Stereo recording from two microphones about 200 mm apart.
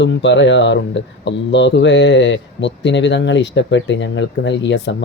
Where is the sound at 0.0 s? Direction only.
65° left (ahead or behind).